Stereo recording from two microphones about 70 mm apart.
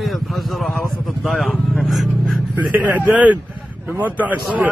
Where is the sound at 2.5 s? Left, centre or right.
Right.